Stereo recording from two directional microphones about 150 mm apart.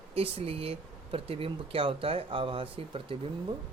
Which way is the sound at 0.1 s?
40° right (ahead or behind).